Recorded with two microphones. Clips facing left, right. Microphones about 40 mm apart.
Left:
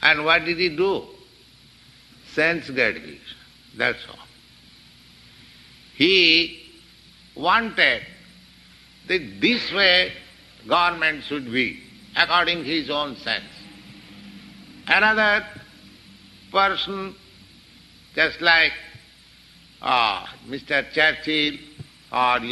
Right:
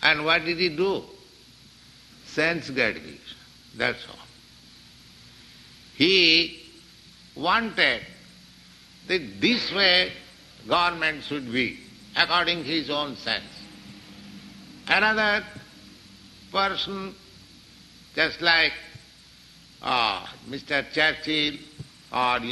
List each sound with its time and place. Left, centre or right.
0.0 s a man's voice: centre
2.2 s a man's voice: centre
5.9 s a man's voice: centre